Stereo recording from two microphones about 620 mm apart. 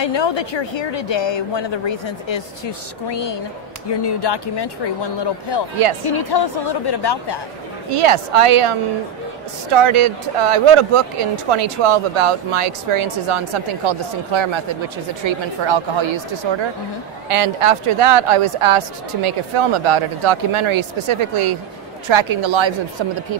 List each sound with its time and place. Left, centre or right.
0.0 s a woman's voice: left
7.9 s speech: right